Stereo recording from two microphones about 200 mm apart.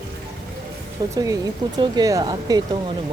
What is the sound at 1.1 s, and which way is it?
Speech, 15° right (ahead or behind).